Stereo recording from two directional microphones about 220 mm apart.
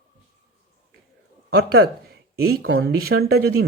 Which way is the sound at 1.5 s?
45° right (ahead or behind).